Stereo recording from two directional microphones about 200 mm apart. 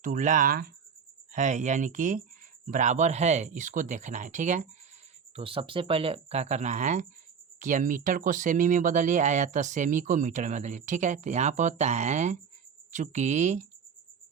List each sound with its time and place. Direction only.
0.0 s speech: 40° right (ahead or behind)
5.3 s speech: 25° right (ahead or behind)